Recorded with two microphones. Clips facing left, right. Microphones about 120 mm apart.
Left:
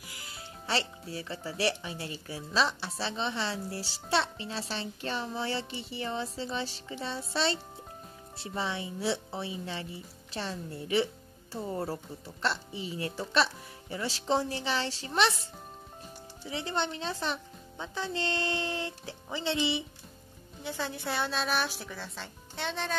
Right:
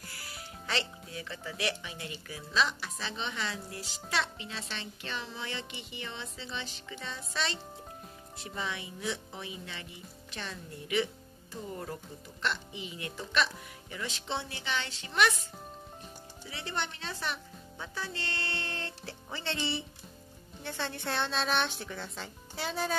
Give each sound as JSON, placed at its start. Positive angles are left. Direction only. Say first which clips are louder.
{"t": 0.0, "sound": "music", "louder": "even", "side_deg": 20}
{"t": 0.7, "sound": "speech", "louder": "left 3 dB", "side_deg": 35}
{"t": 16.4, "sound": "speech", "louder": "left 5 dB", "side_deg": 20}
{"t": 20.6, "sound": "a woman's voice", "louder": "left 2 dB", "side_deg": 10}